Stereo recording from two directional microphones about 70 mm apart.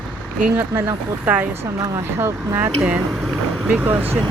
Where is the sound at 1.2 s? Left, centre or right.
Right.